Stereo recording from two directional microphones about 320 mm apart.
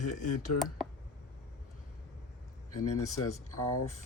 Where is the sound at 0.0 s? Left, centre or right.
Left.